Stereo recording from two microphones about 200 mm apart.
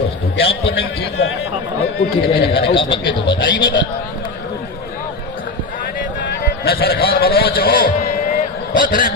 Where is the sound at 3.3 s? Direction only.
60° left (ahead or behind).